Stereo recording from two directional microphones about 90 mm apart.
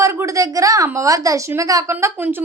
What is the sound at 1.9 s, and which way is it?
Speech, 25° right (ahead or behind).